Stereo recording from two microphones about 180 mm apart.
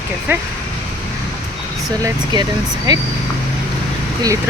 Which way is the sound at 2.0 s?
25° right (ahead or behind).